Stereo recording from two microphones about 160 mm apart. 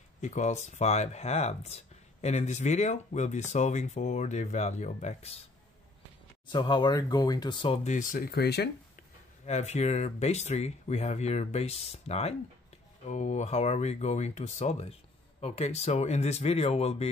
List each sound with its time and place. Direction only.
0.2 s speech: 45° left (ahead or behind)
6.5 s speech: 30° left (ahead or behind)
7.9 s speech: 55° left (ahead or behind); by 9.0 s 90° left
9.5 s speech: 45° left (ahead or behind)